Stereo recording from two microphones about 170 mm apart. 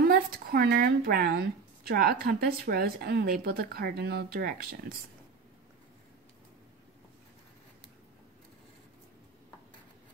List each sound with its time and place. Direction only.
0.1 s a woman's voice: 60° right (ahead or behind)